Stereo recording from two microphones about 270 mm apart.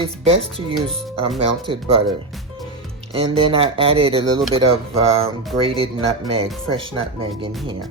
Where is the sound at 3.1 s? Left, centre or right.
Right.